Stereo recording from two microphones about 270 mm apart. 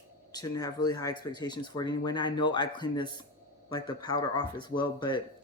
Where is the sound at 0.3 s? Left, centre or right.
Centre.